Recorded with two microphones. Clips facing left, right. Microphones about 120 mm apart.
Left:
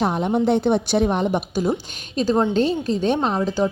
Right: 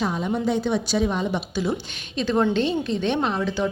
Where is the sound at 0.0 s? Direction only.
55° left (ahead or behind).